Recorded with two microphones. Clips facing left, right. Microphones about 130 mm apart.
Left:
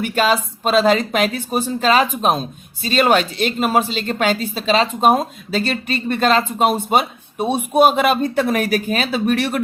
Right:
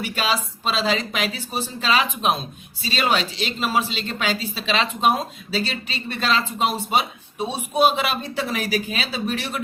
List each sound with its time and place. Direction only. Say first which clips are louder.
0.0 s a woman's voice: left 7 dB; 50° left (ahead or behind)